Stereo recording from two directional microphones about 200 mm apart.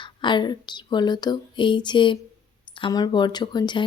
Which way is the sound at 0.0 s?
25° left (ahead or behind).